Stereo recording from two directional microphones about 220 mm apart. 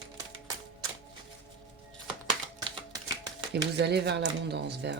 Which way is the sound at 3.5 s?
50° right (ahead or behind).